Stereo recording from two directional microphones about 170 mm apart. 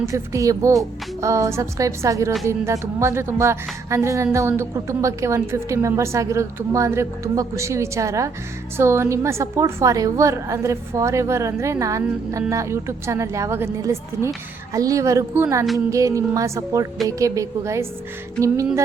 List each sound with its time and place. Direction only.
0.0 s a woman's voice: 15° right (ahead or behind)
15.9 s music: 20° right (ahead or behind)
17.1 s a woman's voice: 20° right (ahead or behind)